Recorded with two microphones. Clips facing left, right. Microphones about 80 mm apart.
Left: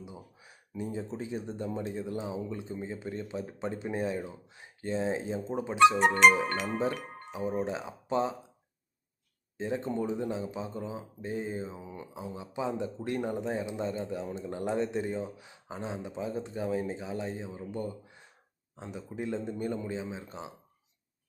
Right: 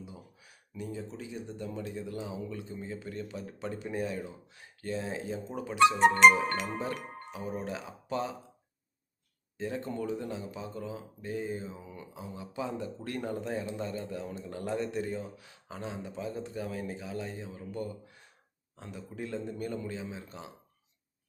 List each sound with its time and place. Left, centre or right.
0.0 s speech: left
9.6 s speech: left